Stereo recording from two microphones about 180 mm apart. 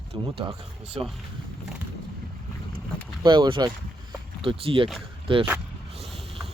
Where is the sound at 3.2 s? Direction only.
25° right (ahead or behind).